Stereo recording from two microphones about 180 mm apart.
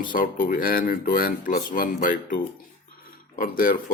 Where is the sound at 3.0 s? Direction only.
50° left (ahead or behind).